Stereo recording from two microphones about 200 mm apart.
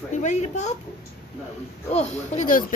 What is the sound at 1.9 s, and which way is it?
Speech, 35° left (ahead or behind).